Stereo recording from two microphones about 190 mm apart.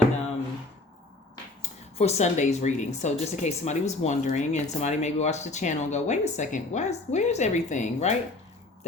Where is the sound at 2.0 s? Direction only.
35° left (ahead or behind).